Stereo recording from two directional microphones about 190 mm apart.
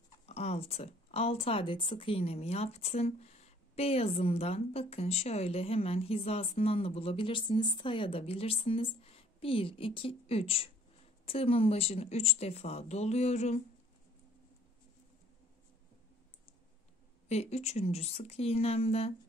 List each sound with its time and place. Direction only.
0.3 s a woman's voice: 35° left (ahead or behind)
17.3 s a woman's voice: 35° left (ahead or behind)